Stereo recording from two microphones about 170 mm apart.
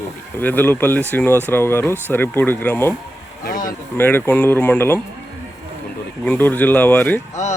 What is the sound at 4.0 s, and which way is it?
Speech, 10° left (ahead or behind).